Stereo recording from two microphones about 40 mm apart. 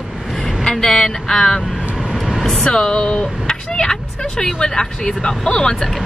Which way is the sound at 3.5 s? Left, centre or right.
Centre.